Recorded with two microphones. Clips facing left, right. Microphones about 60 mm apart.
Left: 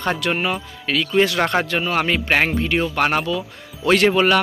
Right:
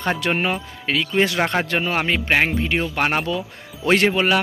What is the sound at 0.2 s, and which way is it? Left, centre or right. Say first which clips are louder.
Speech: even; right.